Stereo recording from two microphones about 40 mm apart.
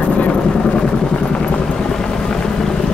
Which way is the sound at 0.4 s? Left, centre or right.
Left.